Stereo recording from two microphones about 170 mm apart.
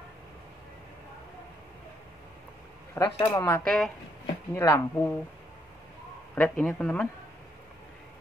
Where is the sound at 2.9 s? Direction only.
20° left (ahead or behind).